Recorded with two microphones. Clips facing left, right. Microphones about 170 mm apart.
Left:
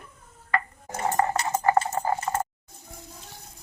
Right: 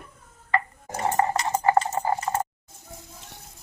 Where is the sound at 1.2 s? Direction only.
25° right (ahead or behind).